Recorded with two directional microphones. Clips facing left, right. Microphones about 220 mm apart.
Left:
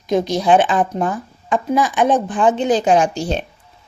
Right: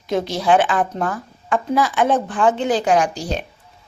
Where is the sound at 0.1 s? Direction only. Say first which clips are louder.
Left 3 dB; 15° left (ahead or behind).